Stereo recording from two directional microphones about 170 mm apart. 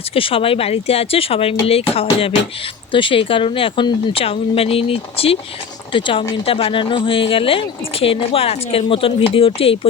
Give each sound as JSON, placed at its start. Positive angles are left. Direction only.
{"t": 0.1, "sound": "speech", "side_deg": 30}